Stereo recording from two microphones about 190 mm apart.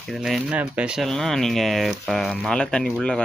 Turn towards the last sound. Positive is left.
turn(degrees=5)  # may be behind; listen again after turning